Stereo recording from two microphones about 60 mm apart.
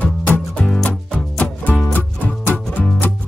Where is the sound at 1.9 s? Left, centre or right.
Left.